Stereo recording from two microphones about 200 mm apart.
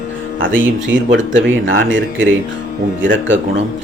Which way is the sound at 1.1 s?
70° right (ahead or behind).